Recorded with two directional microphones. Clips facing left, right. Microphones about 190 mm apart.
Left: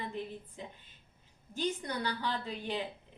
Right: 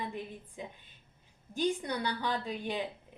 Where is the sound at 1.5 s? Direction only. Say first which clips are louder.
Right 3 dB; 15° right (ahead or behind).